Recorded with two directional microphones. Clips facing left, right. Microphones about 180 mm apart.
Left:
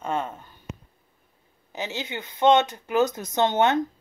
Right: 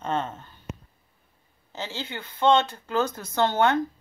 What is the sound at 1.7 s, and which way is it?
Speech, 15° left (ahead or behind).